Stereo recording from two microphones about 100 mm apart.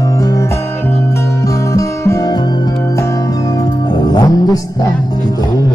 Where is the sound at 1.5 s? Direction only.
35° left (ahead or behind).